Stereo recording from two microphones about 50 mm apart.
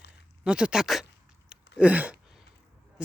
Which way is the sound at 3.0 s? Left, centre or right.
Right.